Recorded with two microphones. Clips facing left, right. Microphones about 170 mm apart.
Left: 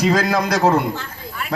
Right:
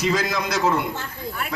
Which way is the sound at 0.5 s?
40° left (ahead or behind).